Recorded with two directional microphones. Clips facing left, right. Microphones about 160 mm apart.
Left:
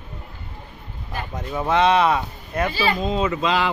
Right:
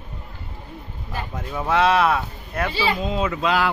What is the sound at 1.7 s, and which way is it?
Speech, 5° right (ahead or behind).